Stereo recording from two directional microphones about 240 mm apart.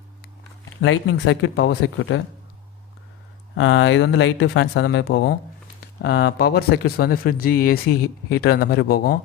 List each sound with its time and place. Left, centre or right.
0.8 s speech: left
3.5 s speech: left